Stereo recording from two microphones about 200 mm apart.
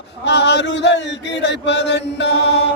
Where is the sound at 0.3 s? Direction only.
60° left (ahead or behind).